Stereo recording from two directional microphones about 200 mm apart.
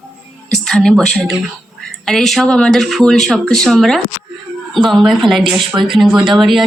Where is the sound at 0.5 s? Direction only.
5° left (ahead or behind).